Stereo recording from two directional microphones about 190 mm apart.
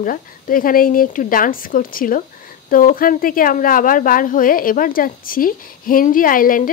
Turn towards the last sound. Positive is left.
turn(degrees=45)  # may be behind; listen again after turning